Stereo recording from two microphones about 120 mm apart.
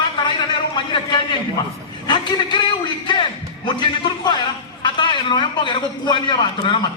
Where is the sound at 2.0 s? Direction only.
40° left (ahead or behind).